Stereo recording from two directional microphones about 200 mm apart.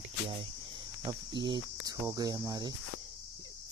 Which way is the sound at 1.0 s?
25° right (ahead or behind).